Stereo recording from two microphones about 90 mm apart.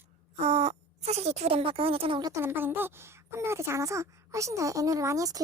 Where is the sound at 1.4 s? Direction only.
90° right.